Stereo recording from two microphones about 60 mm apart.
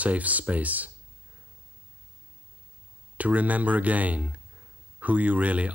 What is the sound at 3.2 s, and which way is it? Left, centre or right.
Speech, right.